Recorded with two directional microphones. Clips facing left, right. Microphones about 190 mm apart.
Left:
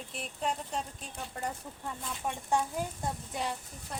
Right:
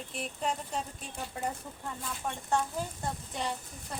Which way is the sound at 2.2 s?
5° left (ahead or behind).